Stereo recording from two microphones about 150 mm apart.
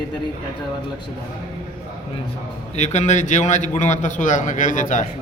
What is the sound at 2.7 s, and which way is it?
A man's voice, 50° left (ahead or behind).